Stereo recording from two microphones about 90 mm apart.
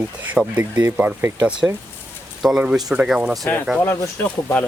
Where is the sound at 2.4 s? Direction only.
5° right (ahead or behind).